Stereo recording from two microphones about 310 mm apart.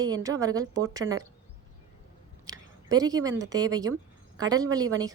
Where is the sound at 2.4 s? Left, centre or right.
Centre.